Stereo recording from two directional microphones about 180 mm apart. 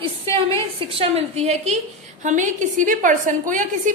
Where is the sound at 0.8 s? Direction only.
30° right (ahead or behind).